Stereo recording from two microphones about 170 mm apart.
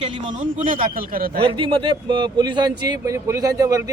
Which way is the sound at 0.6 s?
55° right (ahead or behind).